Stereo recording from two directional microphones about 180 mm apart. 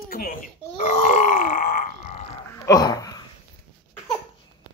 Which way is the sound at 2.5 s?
20° left (ahead or behind).